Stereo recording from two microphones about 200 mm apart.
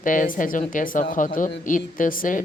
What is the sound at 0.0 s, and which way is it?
Speech, 40° left (ahead or behind).